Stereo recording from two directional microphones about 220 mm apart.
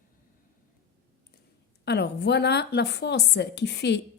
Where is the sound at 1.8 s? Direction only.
50° left (ahead or behind).